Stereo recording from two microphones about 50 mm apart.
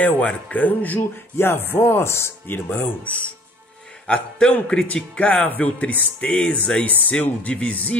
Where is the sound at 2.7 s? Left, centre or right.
Left.